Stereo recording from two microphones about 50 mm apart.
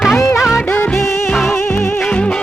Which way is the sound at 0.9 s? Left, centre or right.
Left.